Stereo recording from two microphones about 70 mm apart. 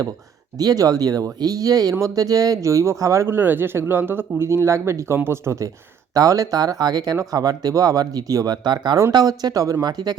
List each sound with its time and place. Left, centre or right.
0.6 s speech: right
3.2 s speech: right
9.1 s speech: right
9.8 s speech: right